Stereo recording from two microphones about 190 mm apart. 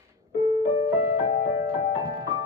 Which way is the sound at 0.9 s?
15° right (ahead or behind).